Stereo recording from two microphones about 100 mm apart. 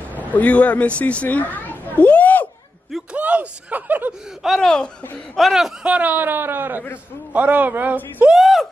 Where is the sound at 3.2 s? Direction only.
15° right (ahead or behind).